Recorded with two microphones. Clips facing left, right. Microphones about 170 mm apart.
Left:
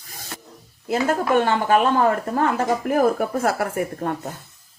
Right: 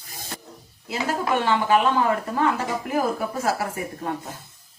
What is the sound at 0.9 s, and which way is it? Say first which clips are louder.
Speech: left 5 dB; 50° left (ahead or behind).